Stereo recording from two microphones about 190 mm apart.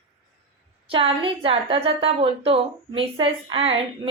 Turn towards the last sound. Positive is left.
turn(degrees=-30)  # may be behind; listen again after turning